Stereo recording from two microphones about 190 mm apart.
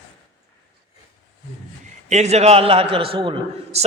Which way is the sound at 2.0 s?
35° right (ahead or behind).